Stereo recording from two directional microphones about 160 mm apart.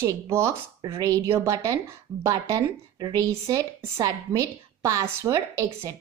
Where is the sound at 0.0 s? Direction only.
15° right (ahead or behind).